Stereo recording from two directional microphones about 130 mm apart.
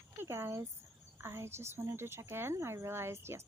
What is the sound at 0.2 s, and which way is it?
Speech, 20° right (ahead or behind).